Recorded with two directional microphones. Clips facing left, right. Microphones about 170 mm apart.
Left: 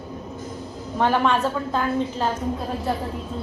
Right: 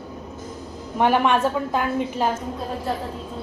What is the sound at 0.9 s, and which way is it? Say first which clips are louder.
A woman's voice: right 2 dB; 15° right (ahead or behind).